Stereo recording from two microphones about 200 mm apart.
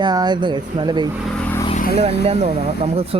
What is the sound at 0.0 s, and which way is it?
A man's voice, 20° right (ahead or behind).